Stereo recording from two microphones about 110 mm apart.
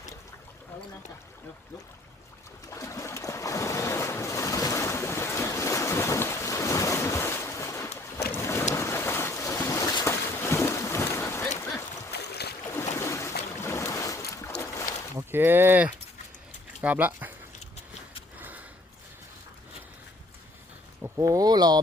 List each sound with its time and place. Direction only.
2.6 s ocean: 30° left (ahead or behind)
8.7 s boat: 25° left (ahead or behind)
10.1 s a sound: 25° left (ahead or behind)
13.0 s boat: 25° left (ahead or behind)
15.3 s speech: 20° right (ahead or behind)
18.3 s a sound: 15° right (ahead or behind)
21.2 s speech: 35° right (ahead or behind)